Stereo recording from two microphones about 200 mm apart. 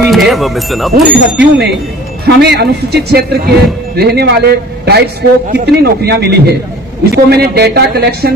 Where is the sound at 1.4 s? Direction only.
55° right (ahead or behind).